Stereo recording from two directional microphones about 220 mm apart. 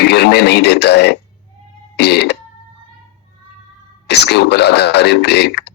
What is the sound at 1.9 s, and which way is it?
Cough, 50° left (ahead or behind).